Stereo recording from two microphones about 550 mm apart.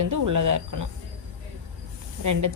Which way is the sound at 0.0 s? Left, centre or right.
Right.